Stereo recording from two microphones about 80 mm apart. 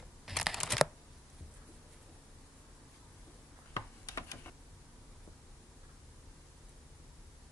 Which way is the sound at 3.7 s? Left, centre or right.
Left.